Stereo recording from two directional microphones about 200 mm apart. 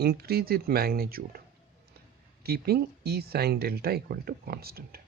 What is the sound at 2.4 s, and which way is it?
Speech, 50° right (ahead or behind).